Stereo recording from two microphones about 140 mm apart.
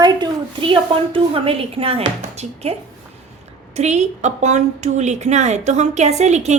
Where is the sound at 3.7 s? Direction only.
55° right (ahead or behind).